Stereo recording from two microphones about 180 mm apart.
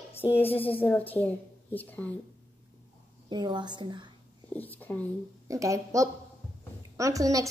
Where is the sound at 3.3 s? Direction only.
25° right (ahead or behind).